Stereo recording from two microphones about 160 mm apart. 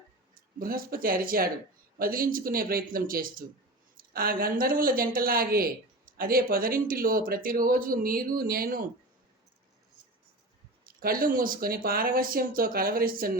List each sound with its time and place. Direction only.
0.3 s speech: 65° right (ahead or behind)
10.8 s speech: 65° right (ahead or behind)